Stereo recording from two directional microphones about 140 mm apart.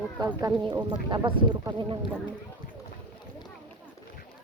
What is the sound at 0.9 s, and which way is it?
Speech, 35° right (ahead or behind).